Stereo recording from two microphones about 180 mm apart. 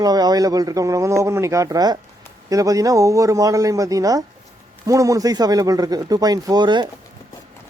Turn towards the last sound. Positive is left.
turn(degrees=-25)  # may be behind; listen again after turning